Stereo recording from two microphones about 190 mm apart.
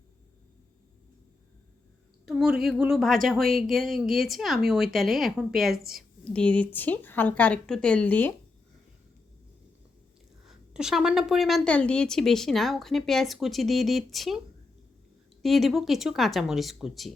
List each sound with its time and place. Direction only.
2.2 s a sound: centre (ahead or behind)
2.6 s speech: centre (ahead or behind)
10.4 s speech: centre (ahead or behind)